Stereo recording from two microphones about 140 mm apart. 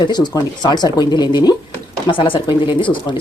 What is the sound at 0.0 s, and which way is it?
Speech, 30° left (ahead or behind).